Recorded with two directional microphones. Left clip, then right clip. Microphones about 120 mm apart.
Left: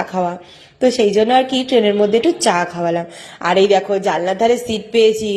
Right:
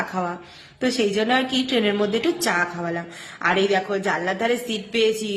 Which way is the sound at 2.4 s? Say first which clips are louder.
Left 7 dB; 45° left (ahead or behind).